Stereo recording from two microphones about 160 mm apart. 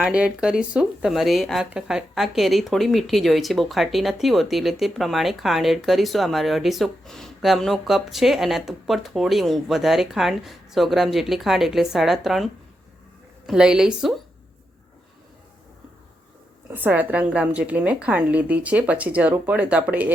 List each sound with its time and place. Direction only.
0.0 s speech: 5° right (ahead or behind)
13.5 s speech: 5° right (ahead or behind)
16.6 s a woman's voice: 10° right (ahead or behind)